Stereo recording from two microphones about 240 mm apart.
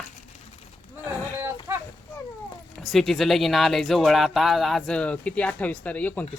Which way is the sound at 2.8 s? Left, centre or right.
Centre.